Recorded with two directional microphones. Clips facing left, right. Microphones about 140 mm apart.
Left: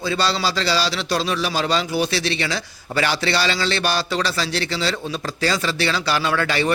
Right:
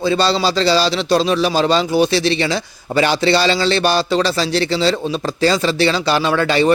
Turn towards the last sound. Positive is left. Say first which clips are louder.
# right 6 dB
turn(degrees=-25)  # may be behind; listen again after turning